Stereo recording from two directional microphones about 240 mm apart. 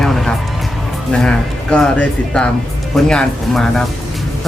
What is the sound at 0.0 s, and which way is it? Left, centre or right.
Music, centre.